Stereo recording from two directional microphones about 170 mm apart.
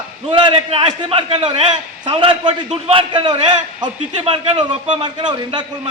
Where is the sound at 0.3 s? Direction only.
30° right (ahead or behind).